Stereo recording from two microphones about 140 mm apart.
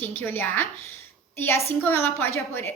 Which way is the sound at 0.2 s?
15° left (ahead or behind).